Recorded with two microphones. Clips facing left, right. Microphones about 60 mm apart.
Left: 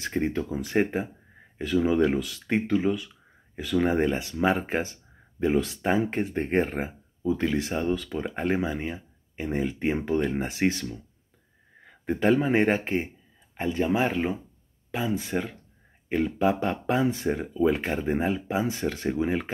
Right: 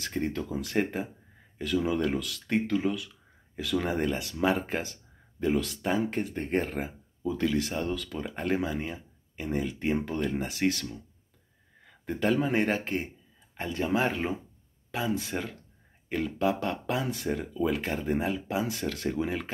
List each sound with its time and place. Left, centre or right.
0.0 s speech: centre
5.8 s speech: left
6.2 s speech: left
6.7 s speech: left
10.2 s speech: left
11.8 s speech: centre
16.1 s speech: centre